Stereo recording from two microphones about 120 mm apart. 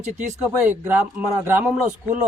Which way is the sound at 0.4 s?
15° right (ahead or behind).